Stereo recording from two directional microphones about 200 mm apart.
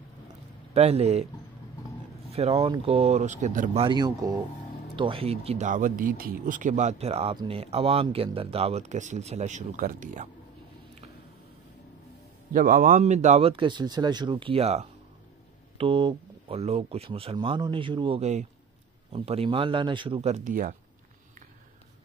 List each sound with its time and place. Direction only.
0.7 s speech: 30° right (ahead or behind)
2.3 s speech: 30° right (ahead or behind)
3.8 s speech: 20° right (ahead or behind); by 10.3 s 40° right (ahead or behind)
12.5 s speech: 45° right (ahead or behind)